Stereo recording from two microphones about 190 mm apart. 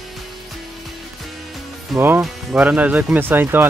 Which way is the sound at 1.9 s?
10° right (ahead or behind).